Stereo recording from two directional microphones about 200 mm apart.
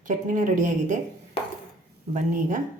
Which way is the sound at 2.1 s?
40° right (ahead or behind).